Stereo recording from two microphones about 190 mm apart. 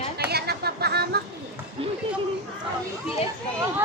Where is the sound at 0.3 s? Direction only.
55° right (ahead or behind).